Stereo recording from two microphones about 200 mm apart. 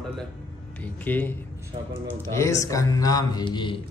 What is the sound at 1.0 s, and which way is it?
Speech, 10° left (ahead or behind).